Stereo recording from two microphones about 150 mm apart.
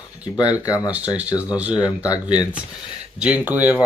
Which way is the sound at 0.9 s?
10° right (ahead or behind).